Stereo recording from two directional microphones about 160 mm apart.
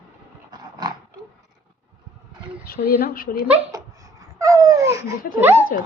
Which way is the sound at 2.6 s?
70° left (ahead or behind).